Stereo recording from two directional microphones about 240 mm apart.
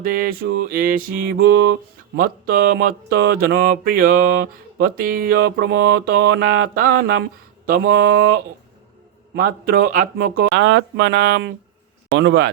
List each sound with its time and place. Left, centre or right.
0.0 s speech: right
9.3 s speech: right